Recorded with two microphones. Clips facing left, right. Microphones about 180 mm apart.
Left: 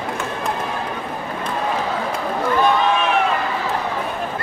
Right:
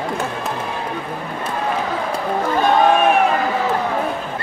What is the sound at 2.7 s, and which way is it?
Run, 50° right (ahead or behind).